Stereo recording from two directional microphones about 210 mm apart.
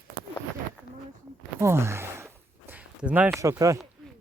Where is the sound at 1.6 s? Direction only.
10° right (ahead or behind).